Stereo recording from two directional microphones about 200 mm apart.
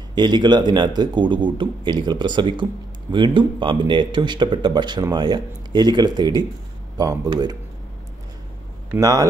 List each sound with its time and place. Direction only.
0.1 s a man's voice: 20° right (ahead or behind)
8.9 s speech: 15° right (ahead or behind)